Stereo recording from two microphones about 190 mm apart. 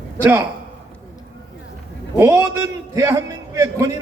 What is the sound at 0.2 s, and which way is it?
Speech, 15° right (ahead or behind).